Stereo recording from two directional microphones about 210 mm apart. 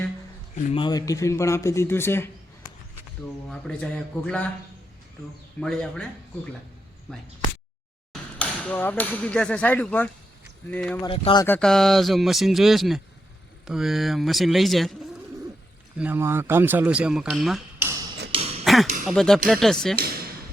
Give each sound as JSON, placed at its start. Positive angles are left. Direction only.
{"t": 0.7, "sound": "a man's voice", "side_deg": 20}
{"t": 3.5, "sound": "speech", "side_deg": 5}
{"t": 5.5, "sound": "speech", "side_deg": 5}
{"t": 8.1, "sound": "a man's voice", "side_deg": 5}
{"t": 11.0, "sound": "speech", "side_deg": 25}
{"t": 11.4, "sound": "speech", "side_deg": 5}
{"t": 16.0, "sound": "speech", "side_deg": -10}
{"t": 18.6, "sound": "a sound", "side_deg": 0}
{"t": 19.0, "sound": "speech", "side_deg": 0}